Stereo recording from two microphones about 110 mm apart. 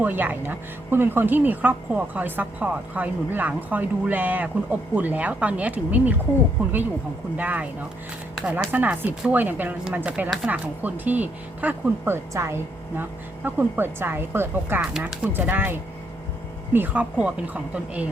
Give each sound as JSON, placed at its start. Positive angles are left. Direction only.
{"t": 0.0, "sound": "a woman's voice", "side_deg": -15}
{"t": 7.3, "sound": "a woman's voice", "side_deg": -15}